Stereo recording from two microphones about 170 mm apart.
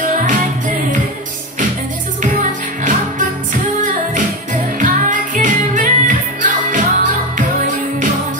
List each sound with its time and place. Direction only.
0.0 s music: 50° right (ahead or behind)
2.3 s music: 50° right (ahead or behind)
4.7 s music: 50° right (ahead or behind)